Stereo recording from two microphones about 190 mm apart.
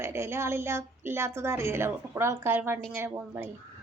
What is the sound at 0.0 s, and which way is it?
A woman's voice, 15° right (ahead or behind).